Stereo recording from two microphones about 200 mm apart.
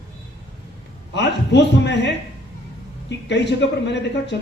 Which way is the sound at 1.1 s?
60° left (ahead or behind).